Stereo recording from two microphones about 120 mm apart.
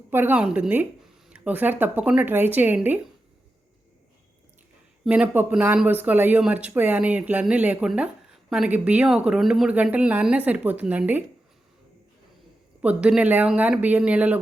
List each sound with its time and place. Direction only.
0.1 s speech: 15° right (ahead or behind)
5.0 s speech: 10° right (ahead or behind)
12.8 s speech: 10° right (ahead or behind)